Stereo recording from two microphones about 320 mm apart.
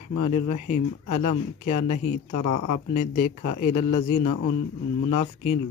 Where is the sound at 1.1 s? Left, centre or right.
Left.